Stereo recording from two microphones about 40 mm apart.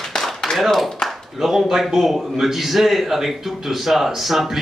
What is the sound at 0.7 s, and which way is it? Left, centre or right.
A man's voice, centre.